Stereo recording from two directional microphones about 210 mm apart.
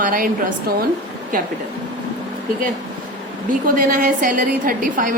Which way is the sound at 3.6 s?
40° right (ahead or behind).